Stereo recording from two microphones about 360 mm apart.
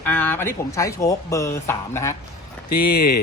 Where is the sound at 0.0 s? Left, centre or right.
Centre.